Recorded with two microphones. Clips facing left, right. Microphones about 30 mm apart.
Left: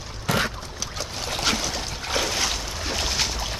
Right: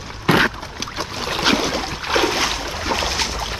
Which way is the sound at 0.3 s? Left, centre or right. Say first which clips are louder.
Right 8 dB; right.